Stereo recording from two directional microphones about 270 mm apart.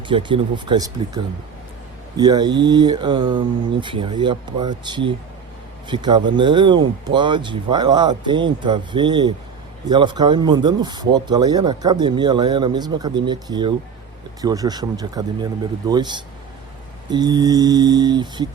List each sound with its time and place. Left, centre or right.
0.1 s speech: centre
2.1 s speech: centre